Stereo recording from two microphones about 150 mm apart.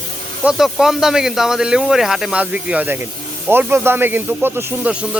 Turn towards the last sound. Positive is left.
turn(degrees=-5)  # may be behind; listen again after turning